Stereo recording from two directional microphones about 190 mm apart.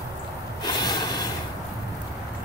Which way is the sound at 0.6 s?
20° left (ahead or behind).